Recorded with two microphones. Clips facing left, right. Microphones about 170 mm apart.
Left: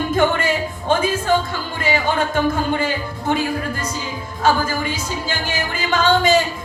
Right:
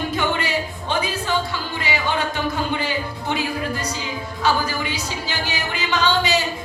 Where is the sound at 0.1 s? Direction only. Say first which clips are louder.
Left 5 dB; 50° left (ahead or behind).